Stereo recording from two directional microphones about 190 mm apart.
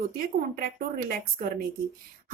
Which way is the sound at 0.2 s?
50° right (ahead or behind).